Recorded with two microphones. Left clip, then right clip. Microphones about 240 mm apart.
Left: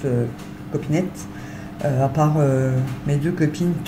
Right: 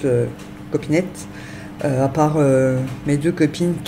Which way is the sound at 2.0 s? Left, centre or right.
Right.